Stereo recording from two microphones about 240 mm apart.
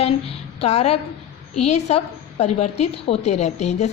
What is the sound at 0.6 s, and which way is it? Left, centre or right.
A woman's voice, left.